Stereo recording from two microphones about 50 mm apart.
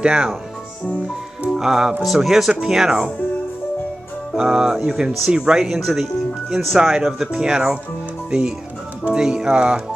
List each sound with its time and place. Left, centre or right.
0.0 s speech: centre
1.5 s speech: centre
4.4 s speech: centre
5.8 s speech: centre; by 9.8 s right